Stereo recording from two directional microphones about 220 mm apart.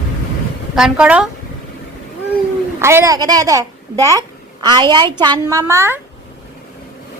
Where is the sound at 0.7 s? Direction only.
5° right (ahead or behind).